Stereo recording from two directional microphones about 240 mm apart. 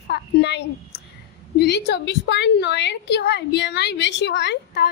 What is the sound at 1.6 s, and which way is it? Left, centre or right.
A woman's voice, left.